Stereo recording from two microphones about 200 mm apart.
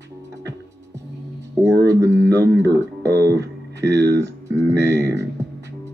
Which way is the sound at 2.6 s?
15° right (ahead or behind).